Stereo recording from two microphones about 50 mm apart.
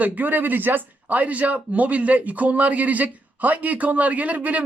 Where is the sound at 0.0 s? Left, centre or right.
Right.